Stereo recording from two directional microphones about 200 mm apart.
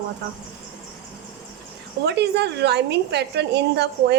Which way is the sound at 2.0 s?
55° right (ahead or behind).